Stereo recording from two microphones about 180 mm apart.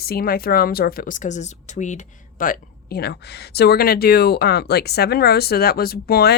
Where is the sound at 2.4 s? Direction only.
55° left (ahead or behind).